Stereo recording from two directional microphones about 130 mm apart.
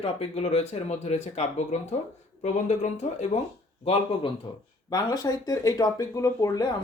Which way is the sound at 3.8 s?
50° left (ahead or behind).